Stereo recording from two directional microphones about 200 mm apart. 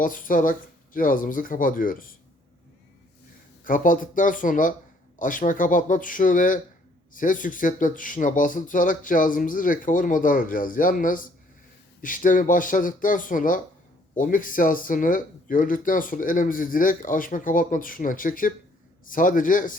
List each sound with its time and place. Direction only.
0.0 s speech: 45° left (ahead or behind)
3.6 s speech: 40° left (ahead or behind)